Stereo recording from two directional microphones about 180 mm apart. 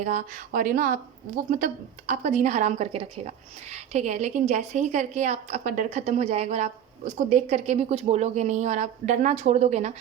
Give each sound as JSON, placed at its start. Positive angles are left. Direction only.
{"t": 0.0, "sound": "a woman's voice", "side_deg": -45}